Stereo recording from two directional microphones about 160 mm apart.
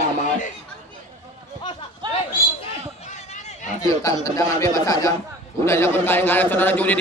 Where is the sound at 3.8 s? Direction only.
20° left (ahead or behind).